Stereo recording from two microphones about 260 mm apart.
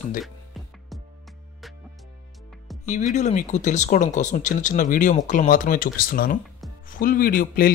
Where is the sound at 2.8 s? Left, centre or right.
Left.